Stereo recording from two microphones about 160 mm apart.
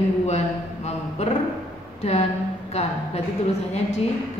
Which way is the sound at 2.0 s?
40° left (ahead or behind).